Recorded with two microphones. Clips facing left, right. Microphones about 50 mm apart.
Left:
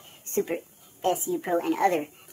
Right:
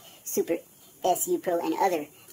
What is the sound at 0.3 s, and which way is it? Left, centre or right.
Speech, centre.